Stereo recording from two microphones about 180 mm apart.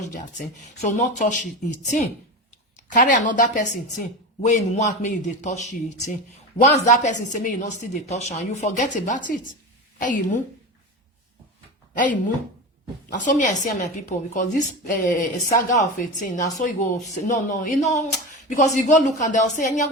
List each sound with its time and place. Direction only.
0.0 s speech: 45° left (ahead or behind)
2.9 s speech: 45° left (ahead or behind)
11.9 s speech: 45° left (ahead or behind)